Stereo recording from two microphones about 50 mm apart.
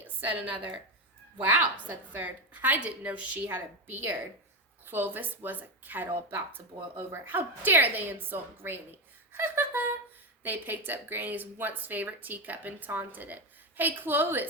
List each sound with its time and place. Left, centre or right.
0.2 s speech: right
2.2 s speech: right
10.4 s speech: right